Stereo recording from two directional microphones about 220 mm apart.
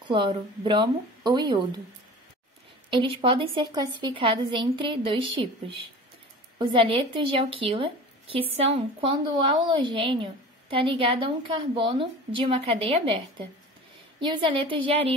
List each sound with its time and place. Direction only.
0.1 s a woman's voice: 20° right (ahead or behind)
2.9 s a woman's voice: 25° right (ahead or behind)
6.6 s a woman's voice: 25° right (ahead or behind)
14.2 s a woman's voice: 20° right (ahead or behind)